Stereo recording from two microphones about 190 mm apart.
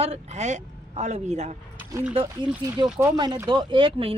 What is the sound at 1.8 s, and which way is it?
Speech, 10° right (ahead or behind).